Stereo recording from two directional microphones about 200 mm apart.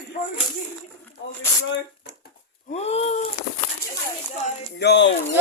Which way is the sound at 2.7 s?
30° left (ahead or behind).